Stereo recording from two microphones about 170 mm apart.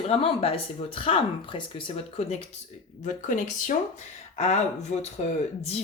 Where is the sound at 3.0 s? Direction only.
50° left (ahead or behind).